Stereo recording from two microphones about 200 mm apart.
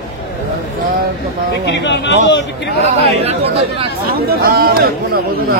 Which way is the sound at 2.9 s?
30° right (ahead or behind).